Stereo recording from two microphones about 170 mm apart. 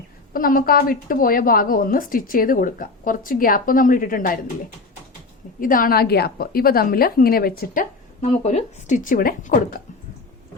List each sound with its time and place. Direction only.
0.3 s a woman's voice: 55° left (ahead or behind)
5.5 s a woman's voice: 55° left (ahead or behind)